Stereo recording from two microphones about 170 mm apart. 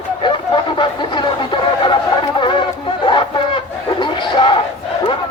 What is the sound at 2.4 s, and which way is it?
Music, 30° left (ahead or behind).